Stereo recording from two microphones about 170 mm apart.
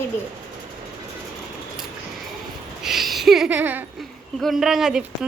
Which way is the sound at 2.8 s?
Centre (ahead or behind).